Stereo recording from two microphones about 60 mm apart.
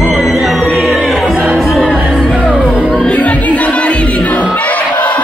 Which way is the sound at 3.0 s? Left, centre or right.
Left.